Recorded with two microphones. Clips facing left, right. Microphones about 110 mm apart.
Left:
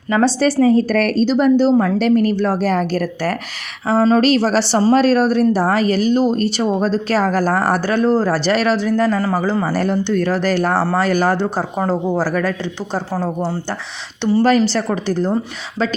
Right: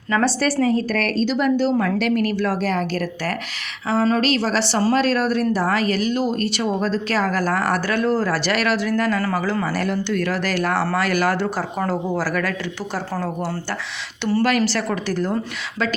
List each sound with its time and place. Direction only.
0.1 s speech: 25° left (ahead or behind)
0.9 s speech: 45° left (ahead or behind)
4.7 s speech: 25° left (ahead or behind)